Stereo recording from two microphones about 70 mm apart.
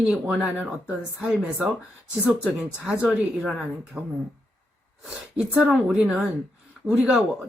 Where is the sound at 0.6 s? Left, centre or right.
Right.